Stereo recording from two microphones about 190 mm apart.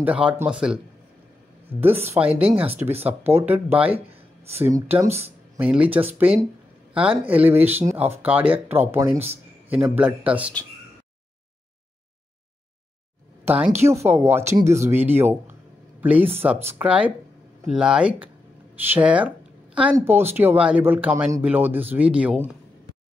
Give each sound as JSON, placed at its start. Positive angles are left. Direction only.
{"t": 0.0, "sound": "speech", "side_deg": -5}
{"t": 13.5, "sound": "speech", "side_deg": -10}